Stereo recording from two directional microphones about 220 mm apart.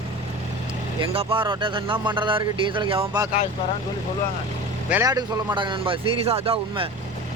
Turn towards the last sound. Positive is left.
turn(degrees=-25)  # may be behind; listen again after turning